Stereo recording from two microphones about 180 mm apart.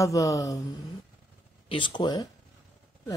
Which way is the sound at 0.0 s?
20° left (ahead or behind).